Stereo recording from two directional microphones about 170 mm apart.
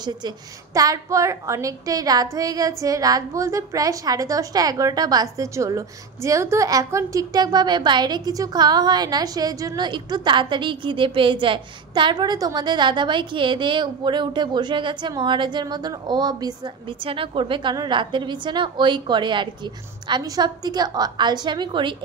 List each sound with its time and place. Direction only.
0.7 s a woman's voice: 20° right (ahead or behind)